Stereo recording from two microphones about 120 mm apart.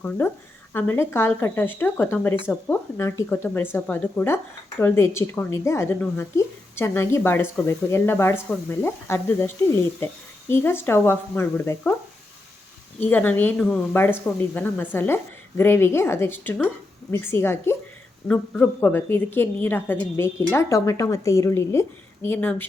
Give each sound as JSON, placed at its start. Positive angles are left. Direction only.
{"t": 0.7, "sound": "a woman's voice", "side_deg": 20}
{"t": 2.5, "sound": "speech", "side_deg": -5}
{"t": 3.0, "sound": "a woman's voice", "side_deg": 20}
{"t": 13.0, "sound": "a woman's voice", "side_deg": 15}